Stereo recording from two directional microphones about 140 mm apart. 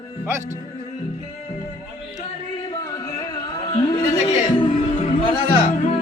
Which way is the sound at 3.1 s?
30° left (ahead or behind).